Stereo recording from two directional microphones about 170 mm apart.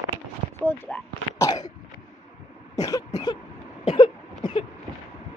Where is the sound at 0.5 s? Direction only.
10° left (ahead or behind).